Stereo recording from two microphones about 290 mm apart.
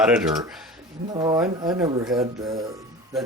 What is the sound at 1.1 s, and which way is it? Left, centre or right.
Speech, centre.